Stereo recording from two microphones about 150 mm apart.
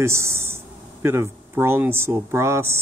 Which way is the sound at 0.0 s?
15° right (ahead or behind).